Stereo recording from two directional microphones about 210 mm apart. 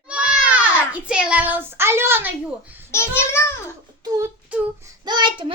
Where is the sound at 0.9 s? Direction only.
5° right (ahead or behind).